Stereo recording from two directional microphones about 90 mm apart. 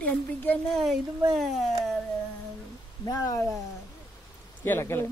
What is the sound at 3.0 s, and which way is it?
Speech, 45° left (ahead or behind).